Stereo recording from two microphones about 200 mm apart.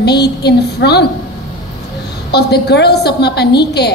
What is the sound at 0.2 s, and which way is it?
Speech, 55° left (ahead or behind).